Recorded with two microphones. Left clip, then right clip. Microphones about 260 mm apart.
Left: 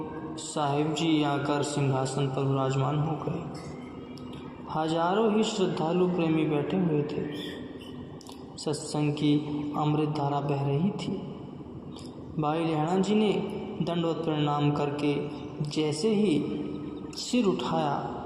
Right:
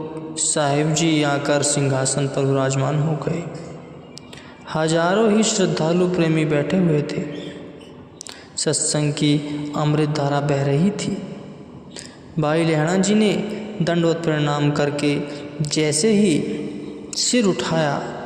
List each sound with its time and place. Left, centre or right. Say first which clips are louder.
0.3 s a man's voice: right 9 dB; right
4.7 s a man's voice: right 8 dB; right
8.6 s a man's voice: right 9 dB; right
12.4 s a man's voice: right 9 dB; right